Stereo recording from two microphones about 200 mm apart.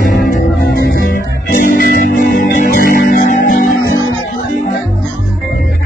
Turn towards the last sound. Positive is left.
turn(degrees=45)  # may be behind; listen again after turning